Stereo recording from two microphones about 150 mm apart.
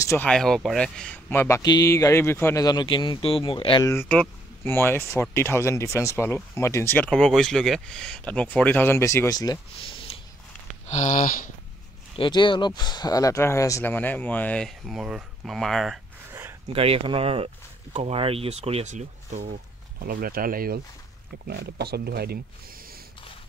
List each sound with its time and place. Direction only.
0.0 s speech: 20° left (ahead or behind)
0.3 s speech: 5° left (ahead or behind)
1.6 s speech: 25° left (ahead or behind)
3.8 s speech: 15° left (ahead or behind)
9.8 s snort: 35° left (ahead or behind)
10.9 s a sound: 55° left (ahead or behind)
12.2 s speech: 30° left (ahead or behind); by 16.0 s centre (ahead or behind)
16.3 s a sound: 15° right (ahead or behind)
16.7 s speech: 40° right (ahead or behind); by 20.8 s 75° right (ahead or behind)
21.5 s speech: 90° right